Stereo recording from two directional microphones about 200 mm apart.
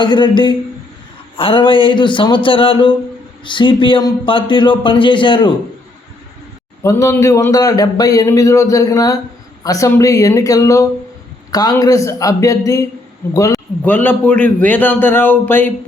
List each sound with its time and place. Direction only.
0.0 s speech: 25° left (ahead or behind)
6.8 s a man's voice: 15° left (ahead or behind)